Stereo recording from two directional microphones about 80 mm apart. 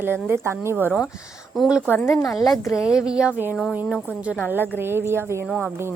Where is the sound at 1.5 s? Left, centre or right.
Centre.